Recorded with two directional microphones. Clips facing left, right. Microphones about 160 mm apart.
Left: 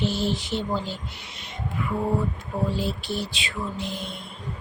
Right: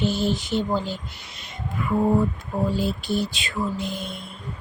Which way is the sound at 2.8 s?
45° right (ahead or behind).